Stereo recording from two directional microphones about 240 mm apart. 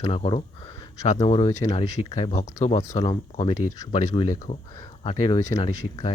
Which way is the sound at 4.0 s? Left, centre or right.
Left.